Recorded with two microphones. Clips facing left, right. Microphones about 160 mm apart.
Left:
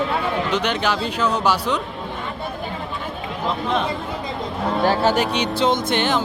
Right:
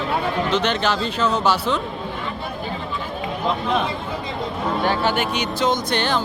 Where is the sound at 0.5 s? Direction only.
10° left (ahead or behind).